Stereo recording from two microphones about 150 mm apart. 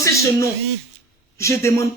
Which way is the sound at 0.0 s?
20° left (ahead or behind).